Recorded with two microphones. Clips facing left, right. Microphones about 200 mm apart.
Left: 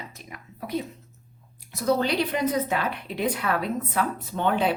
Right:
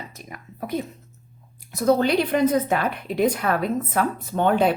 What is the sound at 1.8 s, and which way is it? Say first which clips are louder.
Speech: right 4 dB; 50° right (ahead or behind).